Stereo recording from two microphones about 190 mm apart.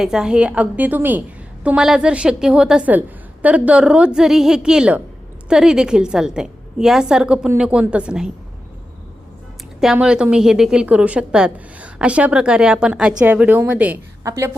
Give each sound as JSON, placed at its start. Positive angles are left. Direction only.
{"t": 0.0, "sound": "a woman's voice", "side_deg": -5}
{"t": 9.8, "sound": "a woman's voice", "side_deg": -5}